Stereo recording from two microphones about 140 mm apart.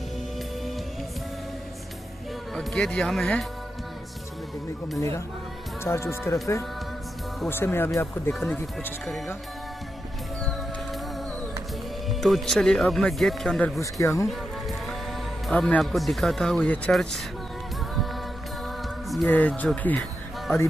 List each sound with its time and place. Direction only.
2.5 s speech: 5° left (ahead or behind)
4.9 s speech: 20° left (ahead or behind)
7.4 s speech: 15° left (ahead or behind)
12.1 s speech: centre (ahead or behind)
13.7 s speech: 20° left (ahead or behind)
14.2 s music: centre (ahead or behind)
15.4 s speech: 5° left (ahead or behind)
19.2 s speech: 10° left (ahead or behind)